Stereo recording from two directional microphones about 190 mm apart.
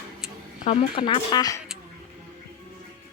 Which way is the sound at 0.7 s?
30° left (ahead or behind).